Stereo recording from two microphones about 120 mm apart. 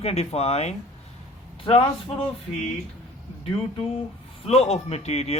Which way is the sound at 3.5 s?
50° left (ahead or behind).